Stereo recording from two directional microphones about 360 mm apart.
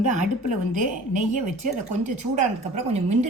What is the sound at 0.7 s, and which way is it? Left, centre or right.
A woman's voice, right.